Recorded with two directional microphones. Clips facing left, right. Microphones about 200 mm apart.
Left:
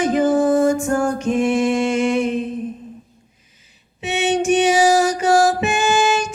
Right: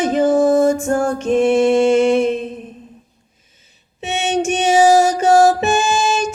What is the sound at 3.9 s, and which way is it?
Music, 25° right (ahead or behind).